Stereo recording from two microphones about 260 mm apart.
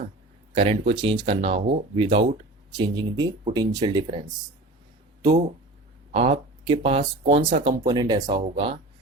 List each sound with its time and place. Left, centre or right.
0.5 s speech: right
6.1 s speech: right
7.9 s speech: centre